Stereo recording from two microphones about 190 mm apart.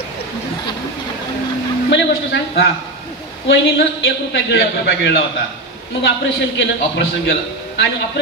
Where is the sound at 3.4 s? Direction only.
70° left (ahead or behind).